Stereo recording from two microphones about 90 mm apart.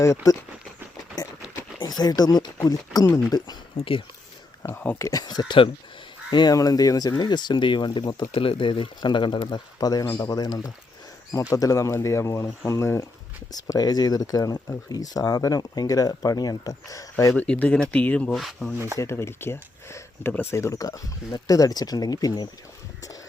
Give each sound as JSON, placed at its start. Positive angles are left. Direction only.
{"t": 0.0, "sound": "speech", "side_deg": 35}
{"t": 1.8, "sound": "speech", "side_deg": 50}
{"t": 3.8, "sound": "speech", "side_deg": 90}
{"t": 4.6, "sound": "speech", "side_deg": 20}
{"t": 5.1, "sound": "speech", "side_deg": 50}
{"t": 8.4, "sound": "speech", "side_deg": 75}
{"t": 9.0, "sound": "speech", "side_deg": 60}
{"t": 9.8, "sound": "speech", "side_deg": 45}
{"t": 13.5, "sound": "speech", "side_deg": 45}
{"t": 17.3, "sound": "speech", "side_deg": 15}
{"t": 18.3, "sound": "speech", "side_deg": 0}
{"t": 18.9, "sound": "speech", "side_deg": 30}